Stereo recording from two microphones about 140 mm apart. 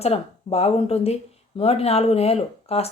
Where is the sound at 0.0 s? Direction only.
45° left (ahead or behind).